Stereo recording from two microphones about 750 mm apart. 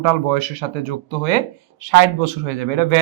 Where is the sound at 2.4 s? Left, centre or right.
Right.